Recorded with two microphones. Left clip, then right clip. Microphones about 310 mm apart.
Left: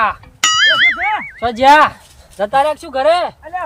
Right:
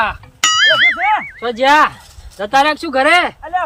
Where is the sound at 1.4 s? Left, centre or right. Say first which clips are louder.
Left 4 dB; left.